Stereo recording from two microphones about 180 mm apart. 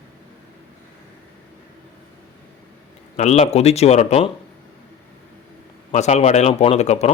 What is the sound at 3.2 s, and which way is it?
Speech, 35° left (ahead or behind).